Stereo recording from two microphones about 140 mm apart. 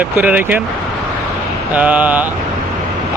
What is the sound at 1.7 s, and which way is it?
Speech, 10° right (ahead or behind).